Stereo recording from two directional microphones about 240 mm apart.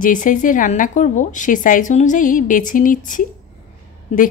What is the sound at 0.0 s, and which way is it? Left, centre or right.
A woman's voice, left.